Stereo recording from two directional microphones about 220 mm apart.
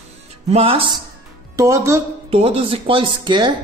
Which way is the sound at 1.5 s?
15° right (ahead or behind).